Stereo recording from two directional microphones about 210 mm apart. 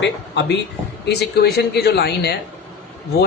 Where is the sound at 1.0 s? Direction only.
55° left (ahead or behind).